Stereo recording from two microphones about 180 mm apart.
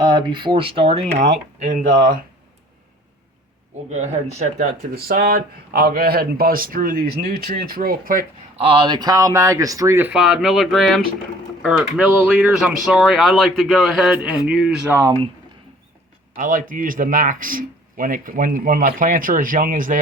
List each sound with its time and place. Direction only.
0.0 s speech: 25° right (ahead or behind); by 2.0 s 40° right (ahead or behind)
3.8 s speech: 40° right (ahead or behind)
8.5 s speech: 30° right (ahead or behind); by 14.9 s 5° right (ahead or behind)
16.3 s speech: 50° right (ahead or behind)